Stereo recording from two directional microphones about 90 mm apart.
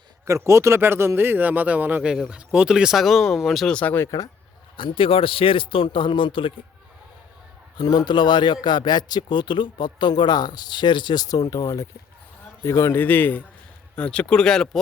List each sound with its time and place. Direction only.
0.3 s speech: 30° right (ahead or behind); by 3.8 s centre (ahead or behind)
3.8 s a man's voice: 20° left (ahead or behind)
4.0 s speech: 40° left (ahead or behind)
4.8 s speech: 75° left (ahead or behind)
7.8 s speech: 50° left (ahead or behind)
11.6 s a man's voice: 35° left (ahead or behind); by 14.8 s 5° left (ahead or behind)